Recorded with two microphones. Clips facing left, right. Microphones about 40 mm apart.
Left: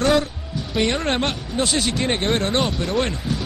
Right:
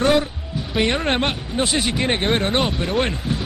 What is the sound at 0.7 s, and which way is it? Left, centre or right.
Speech, centre.